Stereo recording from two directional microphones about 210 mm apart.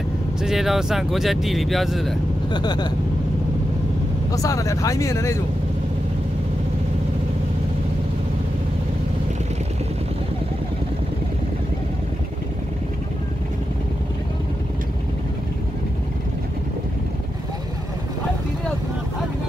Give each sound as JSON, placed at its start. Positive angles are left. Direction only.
{"t": 0.4, "sound": "speech", "side_deg": 0}
{"t": 2.5, "sound": "speech", "side_deg": 20}
{"t": 4.4, "sound": "speech", "side_deg": 15}